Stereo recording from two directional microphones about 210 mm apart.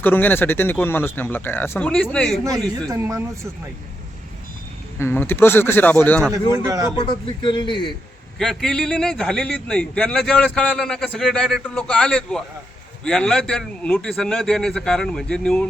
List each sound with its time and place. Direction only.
0.0 s speech: 10° left (ahead or behind)
2.9 s a man's voice: 10° right (ahead or behind)
4.9 s speech: 10° left (ahead or behind)
6.5 s a man's voice: 15° right (ahead or behind)
6.9 s a man's voice: 25° left (ahead or behind)
8.4 s a man's voice: 5° left (ahead or behind)